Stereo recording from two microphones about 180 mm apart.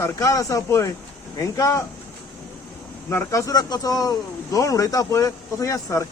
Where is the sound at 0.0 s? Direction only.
15° left (ahead or behind).